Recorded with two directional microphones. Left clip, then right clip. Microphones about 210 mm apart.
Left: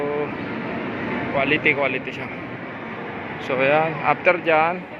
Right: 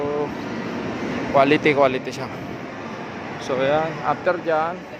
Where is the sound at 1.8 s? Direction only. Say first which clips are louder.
Right 4 dB; 30° right (ahead or behind).